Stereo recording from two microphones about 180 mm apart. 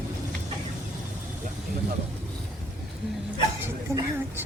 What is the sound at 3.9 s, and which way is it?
Speech, 15° right (ahead or behind).